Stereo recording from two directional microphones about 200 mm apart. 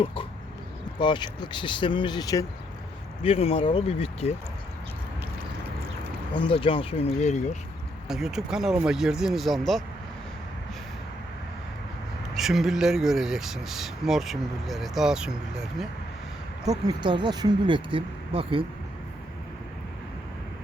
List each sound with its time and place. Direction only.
0.0 s speech: 25° left (ahead or behind)
3.2 s speech: 30° left (ahead or behind)
6.3 s speech: 25° left (ahead or behind)
8.0 s speech: centre (ahead or behind)
12.4 s speech: centre (ahead or behind)
16.6 s speech: 20° right (ahead or behind)